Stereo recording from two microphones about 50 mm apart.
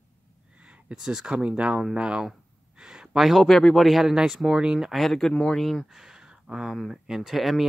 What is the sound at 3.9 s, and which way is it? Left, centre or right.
Speech, centre.